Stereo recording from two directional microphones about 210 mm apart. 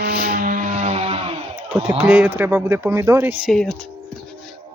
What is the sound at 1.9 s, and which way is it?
Speech, 5° right (ahead or behind).